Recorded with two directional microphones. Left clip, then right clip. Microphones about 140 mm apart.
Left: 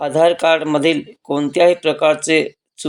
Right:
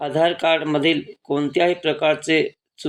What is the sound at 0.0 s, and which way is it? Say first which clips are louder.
Speech: left 5 dB; 40° left (ahead or behind).